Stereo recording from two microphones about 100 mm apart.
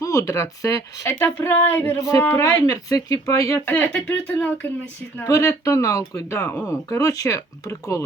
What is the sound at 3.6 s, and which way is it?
Speech, 20° left (ahead or behind).